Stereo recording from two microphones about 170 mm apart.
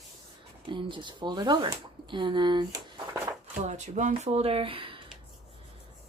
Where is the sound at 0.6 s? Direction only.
30° right (ahead or behind).